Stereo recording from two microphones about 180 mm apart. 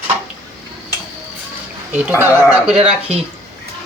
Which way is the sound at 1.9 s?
10° right (ahead or behind).